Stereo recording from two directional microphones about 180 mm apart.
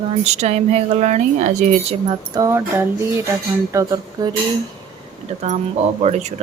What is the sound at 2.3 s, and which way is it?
Speech, 15° right (ahead or behind).